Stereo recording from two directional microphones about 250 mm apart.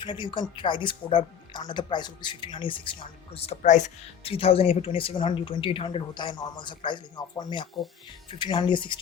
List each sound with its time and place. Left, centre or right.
0.0 s speech: centre